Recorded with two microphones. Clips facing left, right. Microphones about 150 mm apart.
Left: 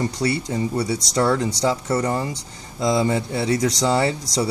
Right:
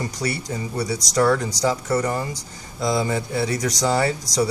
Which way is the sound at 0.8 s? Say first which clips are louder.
Left 2 dB; 40° right (ahead or behind).